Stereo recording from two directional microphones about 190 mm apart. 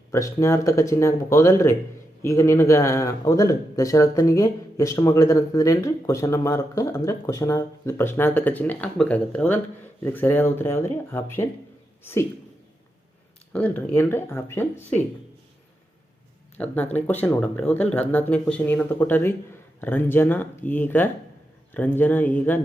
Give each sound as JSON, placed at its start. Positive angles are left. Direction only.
{"t": 0.1, "sound": "speech", "side_deg": 15}
{"t": 13.5, "sound": "speech", "side_deg": 10}
{"t": 16.6, "sound": "speech", "side_deg": 10}